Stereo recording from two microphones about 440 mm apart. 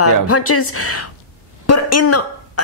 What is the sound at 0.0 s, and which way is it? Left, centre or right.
A woman's voice, left.